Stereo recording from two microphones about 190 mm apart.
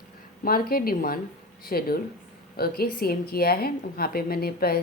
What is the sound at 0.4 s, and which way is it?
A woman's voice, 50° left (ahead or behind).